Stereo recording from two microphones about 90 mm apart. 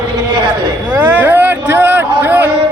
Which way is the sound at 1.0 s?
20° right (ahead or behind).